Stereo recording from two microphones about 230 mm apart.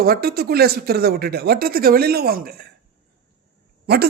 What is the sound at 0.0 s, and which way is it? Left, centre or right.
Speech, right.